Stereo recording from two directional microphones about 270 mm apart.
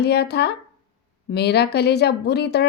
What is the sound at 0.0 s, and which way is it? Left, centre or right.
A woman's voice, left.